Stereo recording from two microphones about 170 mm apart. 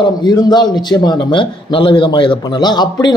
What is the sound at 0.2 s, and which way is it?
A man's voice, 25° left (ahead or behind).